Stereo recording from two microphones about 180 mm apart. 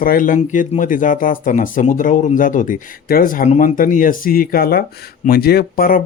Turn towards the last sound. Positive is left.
turn(degrees=55)  # may be behind; listen again after turning